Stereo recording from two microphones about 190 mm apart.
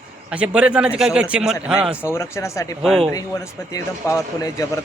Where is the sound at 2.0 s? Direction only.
15° left (ahead or behind).